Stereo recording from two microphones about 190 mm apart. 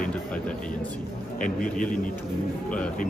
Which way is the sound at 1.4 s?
45° left (ahead or behind).